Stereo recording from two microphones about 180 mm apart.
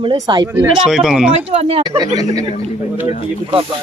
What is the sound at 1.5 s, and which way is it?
Speech, 35° right (ahead or behind).